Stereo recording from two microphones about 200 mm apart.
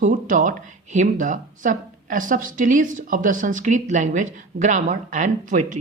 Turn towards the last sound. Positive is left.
turn(degrees=-40)  # may be behind; listen again after turning